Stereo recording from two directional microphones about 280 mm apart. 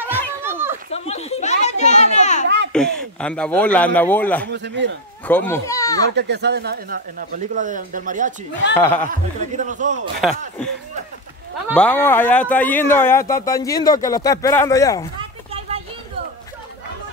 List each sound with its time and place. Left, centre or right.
0.4 s children playing: centre
0.8 s children playing: left
2.4 s a sound: right
2.7 s a man's voice: centre
4.5 s speech: right
5.3 s speech: centre
6.1 s speech: right
8.7 s speech: centre
9.1 s a man's voice: right
10.2 s a man's voice: centre
11.7 s speech: centre
15.1 s a sound: right